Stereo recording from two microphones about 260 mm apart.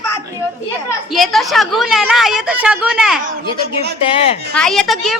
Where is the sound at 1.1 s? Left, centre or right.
Centre.